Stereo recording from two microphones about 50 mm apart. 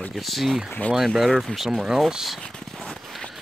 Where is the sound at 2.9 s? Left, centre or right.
Centre.